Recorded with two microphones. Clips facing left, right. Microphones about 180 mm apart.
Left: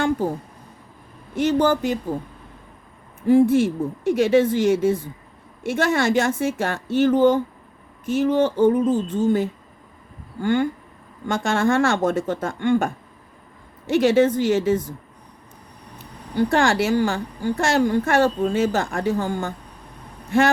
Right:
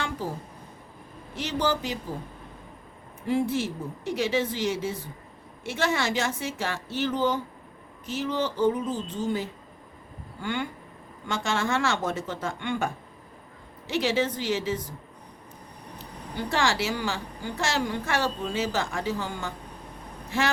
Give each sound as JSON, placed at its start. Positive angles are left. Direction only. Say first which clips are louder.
{"t": 0.2, "sound": "a woman's voice", "louder": "left 9 dB", "side_deg": 50}
{"t": 1.4, "sound": "a woman's voice", "louder": "left 9 dB", "side_deg": 50}
{"t": 3.2, "sound": "a woman's voice", "louder": "left 11 dB", "side_deg": 50}
{"t": 16.5, "sound": "a woman's voice", "louder": "left 6 dB", "side_deg": 55}